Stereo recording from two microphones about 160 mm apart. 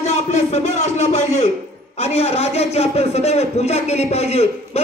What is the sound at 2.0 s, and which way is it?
A man's voice, 40° left (ahead or behind).